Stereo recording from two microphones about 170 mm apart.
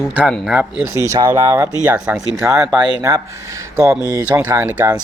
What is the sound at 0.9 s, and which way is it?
Speech, 20° right (ahead or behind).